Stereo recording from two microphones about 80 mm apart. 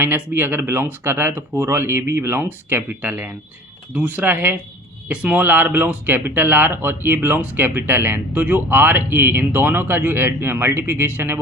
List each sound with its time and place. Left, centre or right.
0.0 s speech: right